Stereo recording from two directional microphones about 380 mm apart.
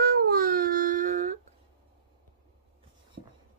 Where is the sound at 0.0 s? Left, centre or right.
Right.